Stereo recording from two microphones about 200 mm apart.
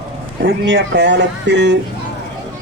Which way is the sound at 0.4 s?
70° right (ahead or behind).